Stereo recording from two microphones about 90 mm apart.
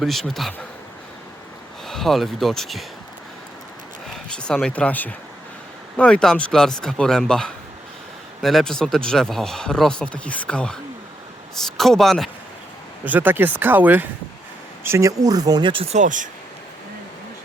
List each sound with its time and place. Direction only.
0.0 s speech: centre (ahead or behind)
1.9 s speech: 5° left (ahead or behind)
4.4 s speech: 10° left (ahead or behind)
13.1 s speech: 20° right (ahead or behind)
14.8 s speech: 35° right (ahead or behind)
15.6 s speech: 75° right (ahead or behind)